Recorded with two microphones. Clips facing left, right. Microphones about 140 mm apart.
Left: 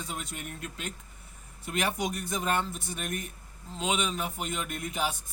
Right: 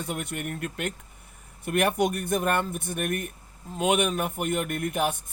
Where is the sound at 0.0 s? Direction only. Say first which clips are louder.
Right 6 dB; 60° right (ahead or behind).